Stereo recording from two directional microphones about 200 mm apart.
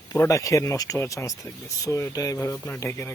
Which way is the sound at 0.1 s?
15° left (ahead or behind).